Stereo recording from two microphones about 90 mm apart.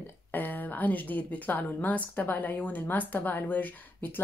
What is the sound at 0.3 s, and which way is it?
A woman's voice, 20° left (ahead or behind).